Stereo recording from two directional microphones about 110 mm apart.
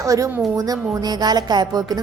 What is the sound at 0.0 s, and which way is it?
Speech, 30° right (ahead or behind).